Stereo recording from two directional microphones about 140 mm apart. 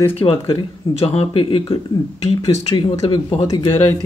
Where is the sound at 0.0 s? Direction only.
40° left (ahead or behind).